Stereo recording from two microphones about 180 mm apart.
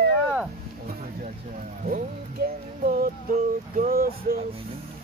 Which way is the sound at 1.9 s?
50° right (ahead or behind).